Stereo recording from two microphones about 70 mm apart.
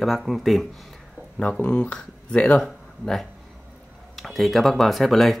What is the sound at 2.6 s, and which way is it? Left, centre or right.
Speech, centre.